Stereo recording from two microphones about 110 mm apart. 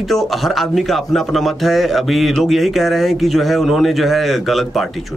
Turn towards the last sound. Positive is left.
turn(degrees=0)  # may be behind; listen again after turning